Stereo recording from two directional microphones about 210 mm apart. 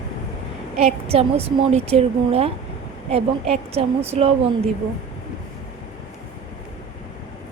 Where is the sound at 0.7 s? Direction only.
30° right (ahead or behind).